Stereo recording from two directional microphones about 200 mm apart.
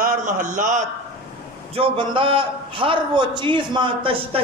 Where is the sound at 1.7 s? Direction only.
25° right (ahead or behind).